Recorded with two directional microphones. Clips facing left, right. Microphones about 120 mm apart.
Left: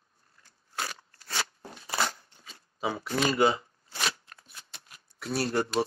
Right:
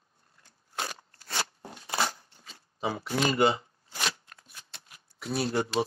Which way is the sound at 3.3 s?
Centre (ahead or behind).